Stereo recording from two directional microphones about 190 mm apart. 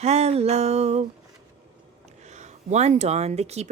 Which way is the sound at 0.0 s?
35° right (ahead or behind).